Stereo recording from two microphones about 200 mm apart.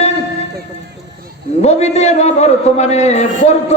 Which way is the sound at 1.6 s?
35° left (ahead or behind).